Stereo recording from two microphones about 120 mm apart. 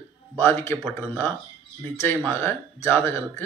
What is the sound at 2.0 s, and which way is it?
A man's voice, 20° left (ahead or behind).